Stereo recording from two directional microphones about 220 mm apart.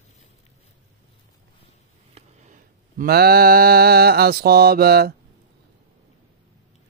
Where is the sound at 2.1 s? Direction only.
35° right (ahead or behind).